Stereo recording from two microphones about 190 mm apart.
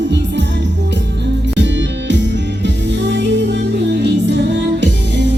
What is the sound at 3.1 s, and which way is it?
Music, 65° right (ahead or behind).